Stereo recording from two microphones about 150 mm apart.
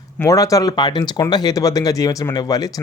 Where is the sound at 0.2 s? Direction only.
20° left (ahead or behind).